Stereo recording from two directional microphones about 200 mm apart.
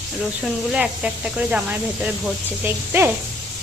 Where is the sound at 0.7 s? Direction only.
5° right (ahead or behind).